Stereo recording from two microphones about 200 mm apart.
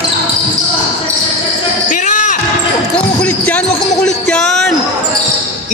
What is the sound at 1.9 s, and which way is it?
Music, 40° left (ahead or behind).